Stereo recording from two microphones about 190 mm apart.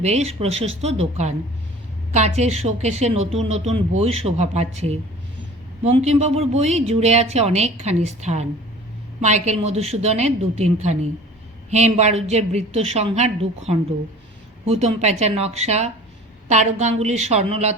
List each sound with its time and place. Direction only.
0.0 s a woman's voice: 35° right (ahead or behind)
14.6 s a woman's voice: 35° right (ahead or behind)